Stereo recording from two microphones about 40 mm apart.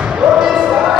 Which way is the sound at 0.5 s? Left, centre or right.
Centre.